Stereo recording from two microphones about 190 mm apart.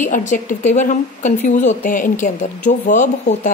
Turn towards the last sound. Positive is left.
turn(degrees=40)  # may be behind; listen again after turning